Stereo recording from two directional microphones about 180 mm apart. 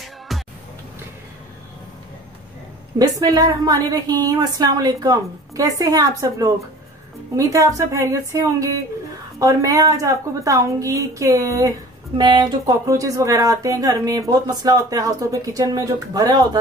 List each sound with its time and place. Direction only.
0.3 s music: centre (ahead or behind)
3.0 s a woman's voice: 20° right (ahead or behind)